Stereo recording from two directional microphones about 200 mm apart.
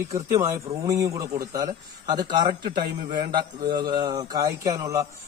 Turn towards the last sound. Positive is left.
turn(degrees=-15)  # may be behind; listen again after turning